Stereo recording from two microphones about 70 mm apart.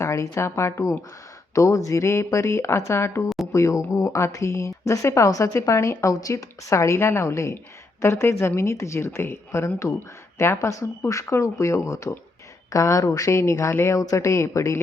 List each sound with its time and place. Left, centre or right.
0.0 s a woman's voice: left
13.9 s a woman's voice: left